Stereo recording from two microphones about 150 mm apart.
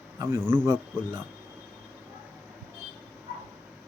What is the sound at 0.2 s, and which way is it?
Speech, 15° right (ahead or behind).